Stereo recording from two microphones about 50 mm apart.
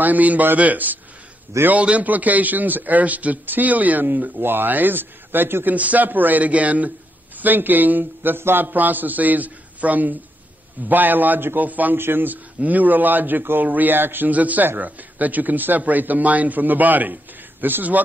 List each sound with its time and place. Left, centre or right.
0.0 s a man's voice: right
5.8 s a man's voice: right
12.0 s speech: right
12.5 s a man's voice: right